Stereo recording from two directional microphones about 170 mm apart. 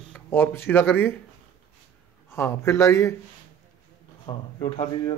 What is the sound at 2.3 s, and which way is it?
Speech, 15° left (ahead or behind).